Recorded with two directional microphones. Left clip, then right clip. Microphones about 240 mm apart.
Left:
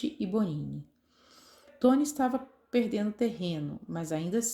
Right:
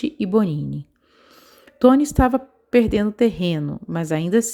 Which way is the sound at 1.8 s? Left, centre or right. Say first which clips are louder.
Right 11 dB; right.